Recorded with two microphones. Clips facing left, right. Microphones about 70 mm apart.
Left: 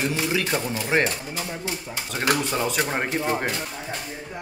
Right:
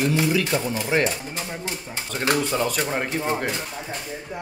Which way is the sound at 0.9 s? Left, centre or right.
Left.